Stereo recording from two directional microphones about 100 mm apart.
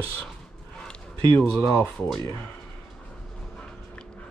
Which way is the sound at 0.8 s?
20° left (ahead or behind).